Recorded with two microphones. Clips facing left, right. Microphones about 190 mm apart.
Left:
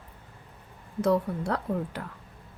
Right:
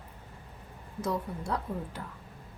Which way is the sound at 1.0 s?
65° left (ahead or behind).